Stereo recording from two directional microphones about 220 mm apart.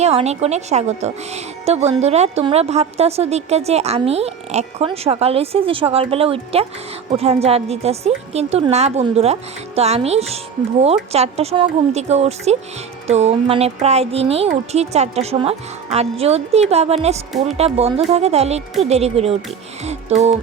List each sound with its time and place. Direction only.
0.0 s speech: 30° right (ahead or behind)